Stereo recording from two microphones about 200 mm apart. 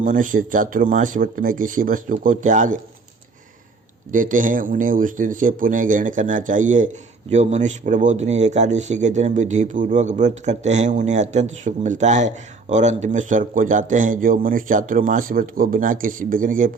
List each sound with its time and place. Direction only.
0.0 s speech: 40° right (ahead or behind)
4.1 s speech: 40° right (ahead or behind)